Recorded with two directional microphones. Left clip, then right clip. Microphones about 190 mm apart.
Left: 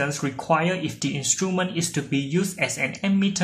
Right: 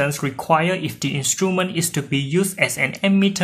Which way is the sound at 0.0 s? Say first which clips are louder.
Right 4 dB; 30° right (ahead or behind).